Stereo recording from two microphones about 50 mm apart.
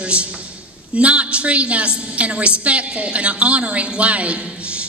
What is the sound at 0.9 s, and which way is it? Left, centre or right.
A woman's voice, right.